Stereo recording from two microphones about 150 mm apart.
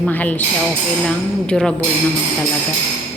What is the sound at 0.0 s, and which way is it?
Speech, 10° left (ahead or behind).